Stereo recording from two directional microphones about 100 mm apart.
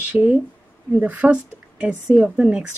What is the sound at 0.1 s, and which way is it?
A woman's voice, 15° right (ahead or behind).